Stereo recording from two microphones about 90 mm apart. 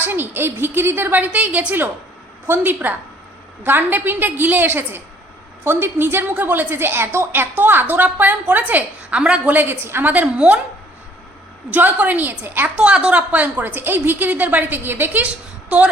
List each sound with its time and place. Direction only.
0.0 s a woman's voice: 20° right (ahead or behind)
11.7 s a woman's voice: 20° right (ahead or behind)